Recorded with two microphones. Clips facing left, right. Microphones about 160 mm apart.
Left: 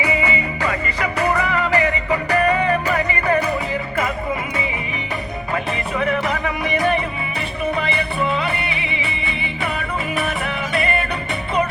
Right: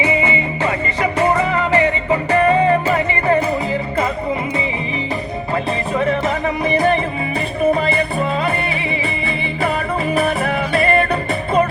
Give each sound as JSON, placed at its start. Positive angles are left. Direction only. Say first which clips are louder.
{"t": 0.0, "sound": "music", "louder": "right 3 dB", "side_deg": -25}
{"t": 6.0, "sound": "music", "louder": "right 2 dB", "side_deg": -35}
{"t": 9.6, "sound": "music", "louder": "right 6 dB", "side_deg": -35}